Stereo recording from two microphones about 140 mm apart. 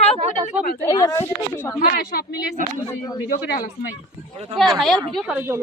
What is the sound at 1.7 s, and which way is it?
Speech, 90° left.